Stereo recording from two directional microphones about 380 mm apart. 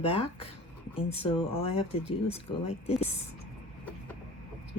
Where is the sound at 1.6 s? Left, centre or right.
Left.